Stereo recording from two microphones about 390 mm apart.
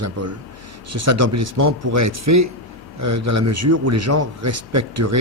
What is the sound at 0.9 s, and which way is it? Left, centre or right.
Speech, right.